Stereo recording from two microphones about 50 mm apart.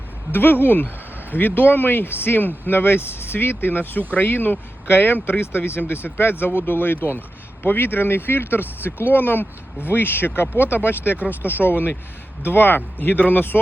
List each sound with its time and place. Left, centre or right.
0.3 s speech: left